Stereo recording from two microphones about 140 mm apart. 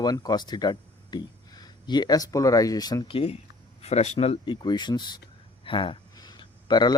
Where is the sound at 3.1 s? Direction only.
40° left (ahead or behind).